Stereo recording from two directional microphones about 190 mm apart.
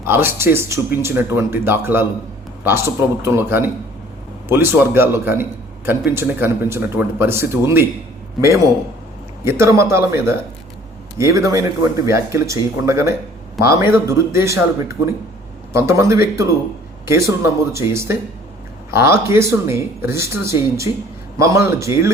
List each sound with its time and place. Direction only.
0.0 s a man's voice: 10° right (ahead or behind)